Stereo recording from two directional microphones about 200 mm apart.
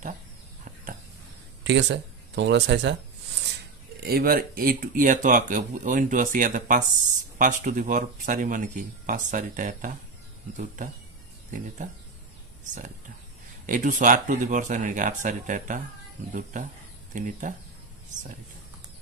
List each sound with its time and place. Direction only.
1.6 s speech: 60° right (ahead or behind)
4.0 s speech: 50° right (ahead or behind)
11.8 s speech: 40° right (ahead or behind)
13.7 s speech: 40° right (ahead or behind)